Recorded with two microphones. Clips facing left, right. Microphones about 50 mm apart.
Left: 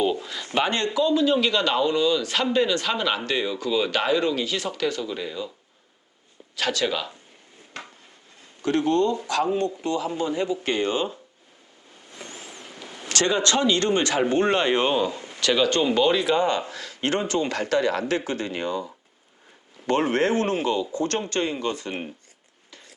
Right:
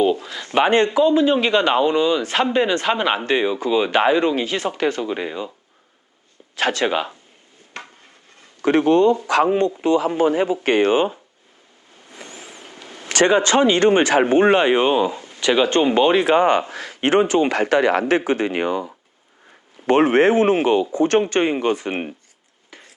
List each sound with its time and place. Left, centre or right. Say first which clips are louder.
0.2 s a sound: right 2 dB; centre
0.4 s a man's voice: right 8 dB; right
6.6 s a man's voice: right 5 dB; right
8.6 s a man's voice: right 7 dB; right
13.1 s speech: right 7 dB; right
18.0 s speech: right 7 dB; right
18.5 s a man's voice: right 6 dB; right
19.9 s a man's voice: right 7 dB; right
22.7 s a sound: right 4 dB; right